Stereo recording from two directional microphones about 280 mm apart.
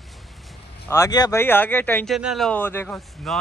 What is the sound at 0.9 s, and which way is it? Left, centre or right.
Speech, centre.